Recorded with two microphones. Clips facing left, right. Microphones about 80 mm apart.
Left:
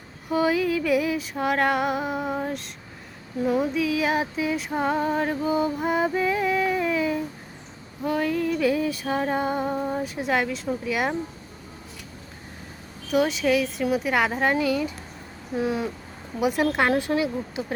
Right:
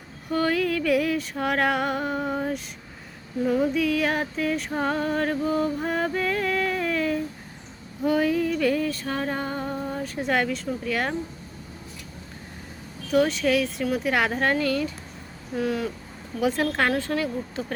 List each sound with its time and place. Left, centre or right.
0.3 s music: centre
3.4 s female singing: centre
8.0 s music: centre
8.5 s female singing: centre
10.2 s music: centre
10.8 s female singing: centre
13.1 s music: centre
13.9 s female singing: centre
15.5 s speech: left
16.4 s female singing: centre